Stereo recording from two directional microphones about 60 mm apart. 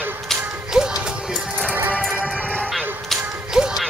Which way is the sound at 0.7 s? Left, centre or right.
Centre.